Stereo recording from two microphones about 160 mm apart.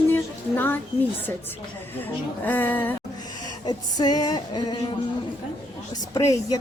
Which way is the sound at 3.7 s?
25° left (ahead or behind).